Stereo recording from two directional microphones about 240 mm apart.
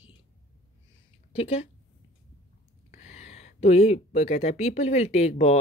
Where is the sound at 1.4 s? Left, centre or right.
Left.